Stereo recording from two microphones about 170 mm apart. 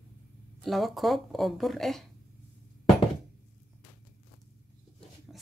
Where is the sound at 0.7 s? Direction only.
Centre (ahead or behind).